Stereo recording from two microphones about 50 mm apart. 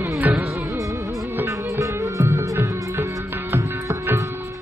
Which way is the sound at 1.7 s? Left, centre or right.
Right.